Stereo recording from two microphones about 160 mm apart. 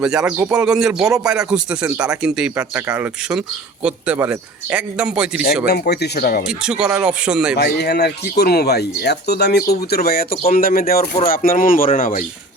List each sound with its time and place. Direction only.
0.0 s a man's voice: 5° right (ahead or behind)
5.6 s speech: 90° left; by 6.5 s 70° left (ahead or behind)
6.5 s speech: 5° right (ahead or behind)
7.5 s speech: 90° left; by 12.2 s 55° left (ahead or behind)